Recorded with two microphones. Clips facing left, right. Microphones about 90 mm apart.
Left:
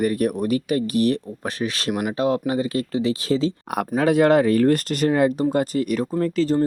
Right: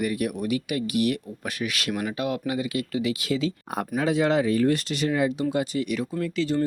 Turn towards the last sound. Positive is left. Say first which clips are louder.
# left 5 dB
turn(degrees=40)  # may be behind; listen again after turning